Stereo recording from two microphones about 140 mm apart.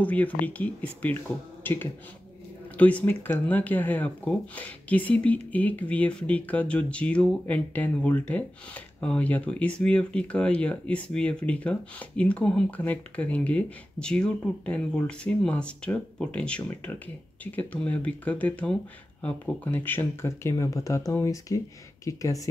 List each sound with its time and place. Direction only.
0.0 s speech: 10° left (ahead or behind)